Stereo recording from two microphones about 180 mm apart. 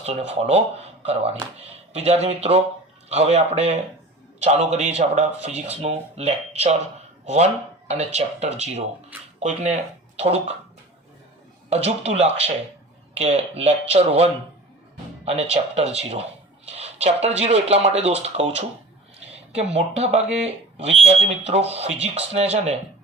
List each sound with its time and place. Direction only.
0.0 s speech: 35° right (ahead or behind)
11.7 s speech: 35° right (ahead or behind)